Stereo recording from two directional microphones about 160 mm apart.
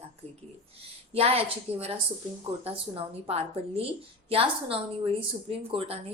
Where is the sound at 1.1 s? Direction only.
40° right (ahead or behind).